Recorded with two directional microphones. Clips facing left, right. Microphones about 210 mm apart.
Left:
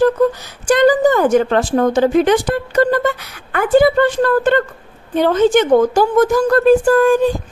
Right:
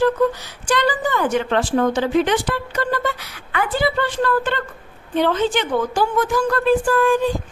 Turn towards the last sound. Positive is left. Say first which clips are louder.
# left 6 dB
turn(degrees=45)  # may be behind; listen again after turning